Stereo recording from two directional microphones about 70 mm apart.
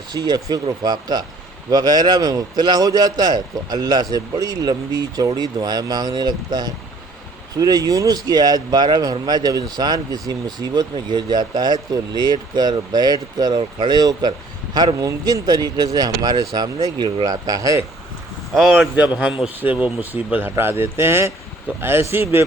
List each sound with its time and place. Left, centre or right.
0.1 s speech: right
7.5 s speech: right
18.7 s a man's voice: right